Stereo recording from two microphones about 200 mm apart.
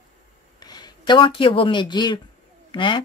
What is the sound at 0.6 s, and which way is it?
Speech, 20° left (ahead or behind).